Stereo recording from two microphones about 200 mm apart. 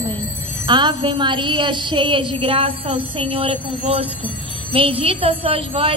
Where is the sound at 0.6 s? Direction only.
25° right (ahead or behind).